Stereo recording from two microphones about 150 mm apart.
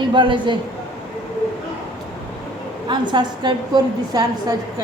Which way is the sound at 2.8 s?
30° right (ahead or behind).